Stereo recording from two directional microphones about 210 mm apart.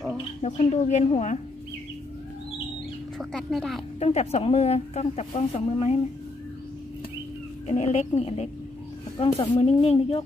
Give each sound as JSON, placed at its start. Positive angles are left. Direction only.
{"t": 0.4, "sound": "a woman's voice", "side_deg": 30}
{"t": 3.2, "sound": "speech", "side_deg": 0}
{"t": 4.0, "sound": "speech", "side_deg": 30}
{"t": 7.6, "sound": "a woman's voice", "side_deg": 35}